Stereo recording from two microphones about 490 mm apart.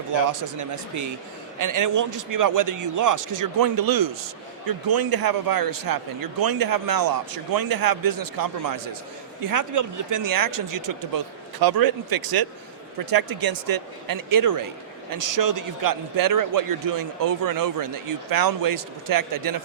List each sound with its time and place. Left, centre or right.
0.3 s a man's voice: right